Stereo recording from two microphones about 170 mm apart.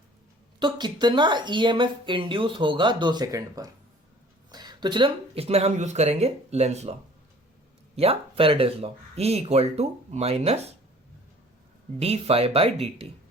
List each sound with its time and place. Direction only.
0.6 s speech: 25° right (ahead or behind)
7.9 s speech: 35° right (ahead or behind)
11.9 s speech: 35° right (ahead or behind)